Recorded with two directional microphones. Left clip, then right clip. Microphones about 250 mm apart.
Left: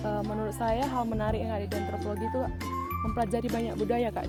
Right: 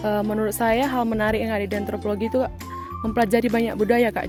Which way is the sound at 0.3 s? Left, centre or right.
Right.